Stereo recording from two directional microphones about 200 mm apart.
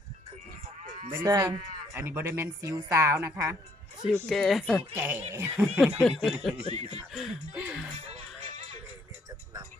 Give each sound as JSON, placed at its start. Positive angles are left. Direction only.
{"t": 1.1, "sound": "a woman's voice", "side_deg": -15}
{"t": 4.3, "sound": "snicker", "side_deg": 0}
{"t": 4.9, "sound": "a woman's voice", "side_deg": -10}
{"t": 6.0, "sound": "snicker", "side_deg": 0}
{"t": 7.5, "sound": "speech", "side_deg": -5}
{"t": 8.5, "sound": "music", "side_deg": -35}